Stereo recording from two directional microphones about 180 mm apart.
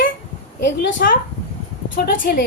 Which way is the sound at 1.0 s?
55° left (ahead or behind).